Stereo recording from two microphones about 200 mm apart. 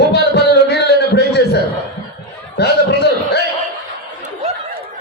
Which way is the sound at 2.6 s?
55° left (ahead or behind).